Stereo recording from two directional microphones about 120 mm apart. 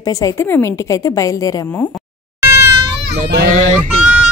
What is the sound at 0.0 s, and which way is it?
A woman's voice, 30° left (ahead or behind).